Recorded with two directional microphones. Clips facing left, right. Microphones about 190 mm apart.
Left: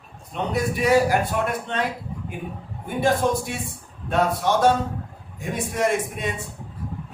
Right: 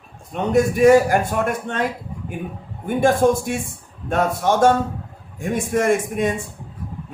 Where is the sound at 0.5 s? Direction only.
50° right (ahead or behind).